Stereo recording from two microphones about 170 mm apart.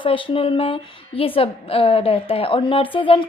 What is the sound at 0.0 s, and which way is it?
A woman's voice, 30° left (ahead or behind).